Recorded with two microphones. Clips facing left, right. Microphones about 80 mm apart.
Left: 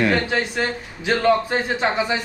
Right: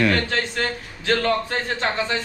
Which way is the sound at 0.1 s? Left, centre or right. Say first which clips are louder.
Left 2 dB; centre.